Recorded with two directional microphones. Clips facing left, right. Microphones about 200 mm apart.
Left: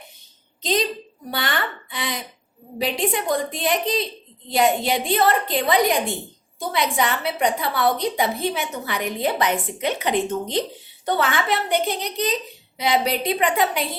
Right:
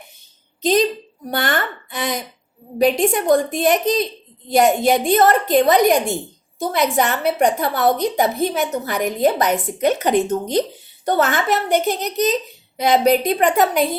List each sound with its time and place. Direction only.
1.3 s a woman's voice: 50° right (ahead or behind)